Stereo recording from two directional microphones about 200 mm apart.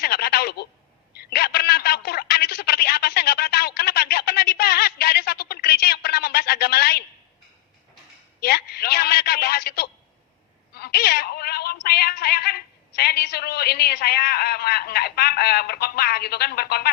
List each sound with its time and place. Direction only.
0.0 s telephone: 50° left (ahead or behind)
8.4 s a sound: 50° left (ahead or behind)
10.8 s music: 50° left (ahead or behind)